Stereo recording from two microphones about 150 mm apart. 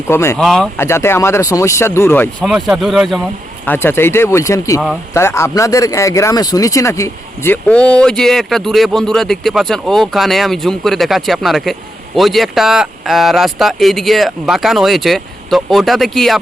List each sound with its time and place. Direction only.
0.1 s speech: 20° left (ahead or behind)
0.3 s speech: 5° left (ahead or behind)
0.8 s speech: 15° left (ahead or behind)
2.4 s speech: 5° right (ahead or behind)
3.7 s speech: 15° left (ahead or behind)